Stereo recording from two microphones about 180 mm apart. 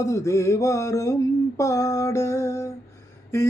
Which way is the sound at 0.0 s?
15° left (ahead or behind).